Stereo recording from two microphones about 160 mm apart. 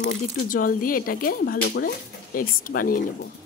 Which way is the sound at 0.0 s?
55° left (ahead or behind).